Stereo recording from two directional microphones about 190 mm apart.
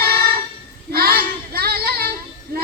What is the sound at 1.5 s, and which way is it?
Child singing, 55° right (ahead or behind).